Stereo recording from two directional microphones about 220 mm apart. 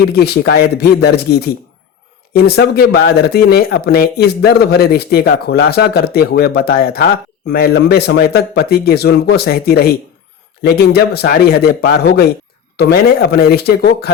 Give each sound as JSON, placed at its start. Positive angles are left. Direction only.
{"t": 0.1, "sound": "speech", "side_deg": 45}